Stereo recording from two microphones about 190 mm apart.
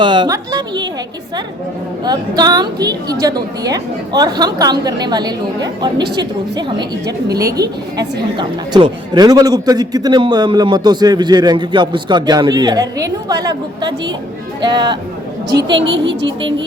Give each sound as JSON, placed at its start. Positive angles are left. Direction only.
{"t": 0.0, "sound": "a man's voice", "side_deg": -25}
{"t": 2.0, "sound": "a man's voice", "side_deg": -20}
{"t": 15.7, "sound": "speech", "side_deg": -75}